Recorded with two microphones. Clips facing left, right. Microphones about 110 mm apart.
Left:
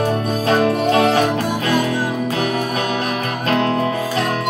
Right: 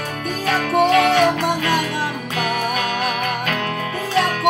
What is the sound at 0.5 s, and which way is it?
Music, 30° left (ahead or behind).